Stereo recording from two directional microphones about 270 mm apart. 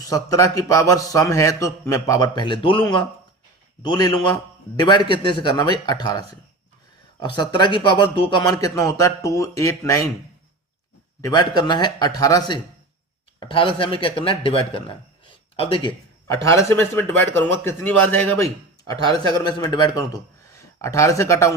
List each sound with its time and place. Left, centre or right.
0.0 s a man's voice: centre
11.2 s a man's voice: centre